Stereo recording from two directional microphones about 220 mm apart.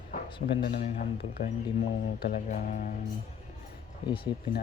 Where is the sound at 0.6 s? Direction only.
40° left (ahead or behind).